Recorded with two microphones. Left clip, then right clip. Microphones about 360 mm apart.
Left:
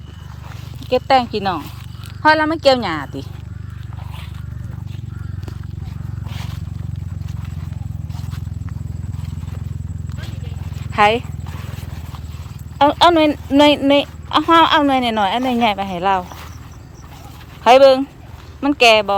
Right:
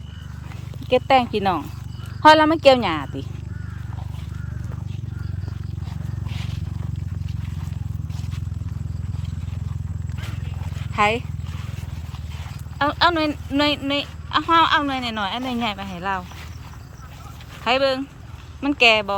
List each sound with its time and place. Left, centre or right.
0.9 s speech: centre
10.9 s speech: centre
12.8 s speech: centre
17.6 s speech: centre